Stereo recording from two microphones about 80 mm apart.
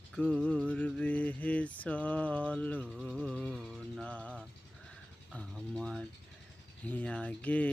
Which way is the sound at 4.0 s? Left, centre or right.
Centre.